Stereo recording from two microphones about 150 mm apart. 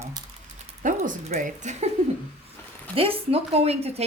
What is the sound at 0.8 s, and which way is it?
Speech, 60° right (ahead or behind).